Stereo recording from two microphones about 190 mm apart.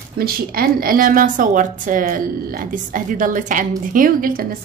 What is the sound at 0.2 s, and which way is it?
A woman's voice, 50° right (ahead or behind).